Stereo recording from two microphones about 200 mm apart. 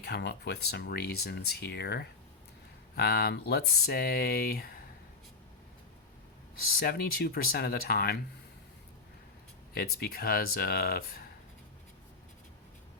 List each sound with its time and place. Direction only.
0.0 s speech: 55° left (ahead or behind)
6.7 s speech: 50° left (ahead or behind)
9.7 s speech: 50° left (ahead or behind)